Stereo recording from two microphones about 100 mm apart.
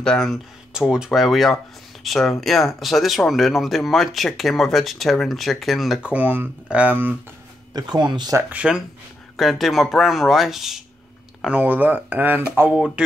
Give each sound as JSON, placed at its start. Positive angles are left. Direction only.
{"t": 0.0, "sound": "speech", "side_deg": 5}
{"t": 0.7, "sound": "speech", "side_deg": -5}
{"t": 6.0, "sound": "speech", "side_deg": -15}
{"t": 7.7, "sound": "speech", "side_deg": -45}
{"t": 8.5, "sound": "speech", "side_deg": -10}
{"t": 11.4, "sound": "speech", "side_deg": -15}
{"t": 12.7, "sound": "speech", "side_deg": -10}